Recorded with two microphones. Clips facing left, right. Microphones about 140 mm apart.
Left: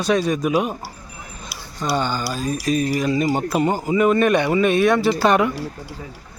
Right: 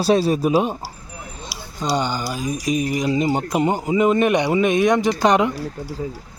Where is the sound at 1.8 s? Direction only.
15° right (ahead or behind).